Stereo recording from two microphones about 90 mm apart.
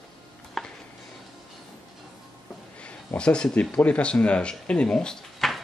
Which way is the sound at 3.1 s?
10° left (ahead or behind).